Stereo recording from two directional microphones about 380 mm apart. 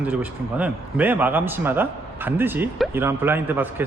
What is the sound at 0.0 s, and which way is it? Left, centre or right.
A man's voice, centre.